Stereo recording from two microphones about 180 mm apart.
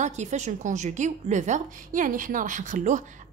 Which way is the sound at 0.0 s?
40° right (ahead or behind).